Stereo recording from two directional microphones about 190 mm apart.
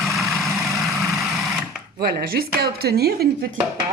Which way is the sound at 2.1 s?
55° right (ahead or behind).